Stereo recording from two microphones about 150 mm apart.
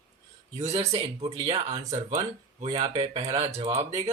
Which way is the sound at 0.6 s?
45° right (ahead or behind).